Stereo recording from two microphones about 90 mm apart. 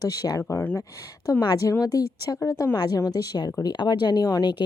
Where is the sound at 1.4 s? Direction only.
45° left (ahead or behind).